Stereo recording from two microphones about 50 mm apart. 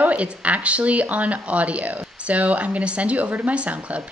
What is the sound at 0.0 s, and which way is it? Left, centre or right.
Speech, right.